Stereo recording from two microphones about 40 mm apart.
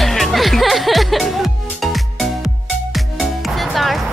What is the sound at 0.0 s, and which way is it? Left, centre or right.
Music, centre.